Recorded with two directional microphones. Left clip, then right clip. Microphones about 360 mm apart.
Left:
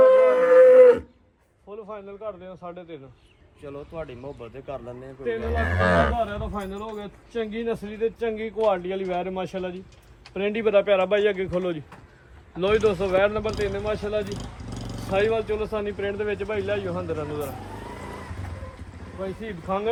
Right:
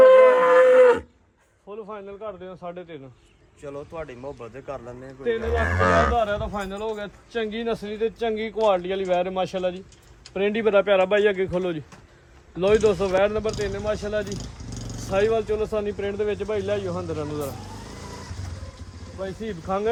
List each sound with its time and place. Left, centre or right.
0.0 s livestock: centre
1.7 s a man's voice: right
3.6 s speech: centre
6.1 s a man's voice: right
14.3 s a sound: left
15.1 s a man's voice: right
19.4 s a man's voice: right